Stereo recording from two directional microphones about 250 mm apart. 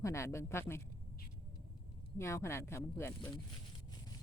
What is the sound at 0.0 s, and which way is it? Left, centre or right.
Speech, centre.